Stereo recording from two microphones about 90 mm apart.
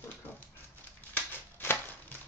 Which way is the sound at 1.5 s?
25° left (ahead or behind).